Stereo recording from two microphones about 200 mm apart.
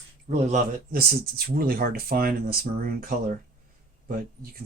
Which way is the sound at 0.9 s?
50° right (ahead or behind).